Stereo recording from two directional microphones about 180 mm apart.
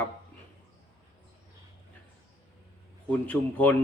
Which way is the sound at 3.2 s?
10° left (ahead or behind).